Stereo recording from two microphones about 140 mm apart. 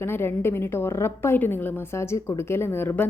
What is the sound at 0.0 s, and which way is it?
A woman's voice, 15° left (ahead or behind).